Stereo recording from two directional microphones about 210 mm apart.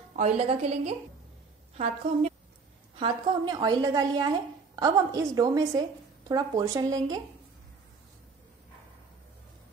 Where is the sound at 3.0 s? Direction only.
20° right (ahead or behind).